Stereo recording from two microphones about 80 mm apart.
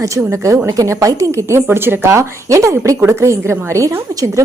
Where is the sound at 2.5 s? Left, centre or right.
Right.